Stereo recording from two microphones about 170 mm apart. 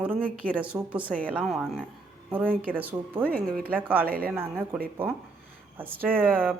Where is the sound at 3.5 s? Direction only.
5° left (ahead or behind).